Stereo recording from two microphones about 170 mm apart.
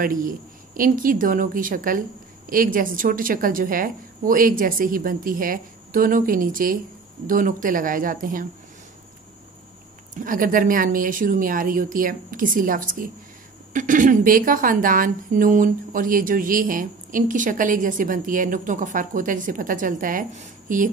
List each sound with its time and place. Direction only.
0.0 s a woman's voice: 55° right (ahead or behind)
10.1 s a woman's voice: 50° right (ahead or behind)